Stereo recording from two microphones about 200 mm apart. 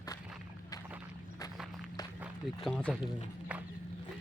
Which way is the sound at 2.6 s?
5° left (ahead or behind).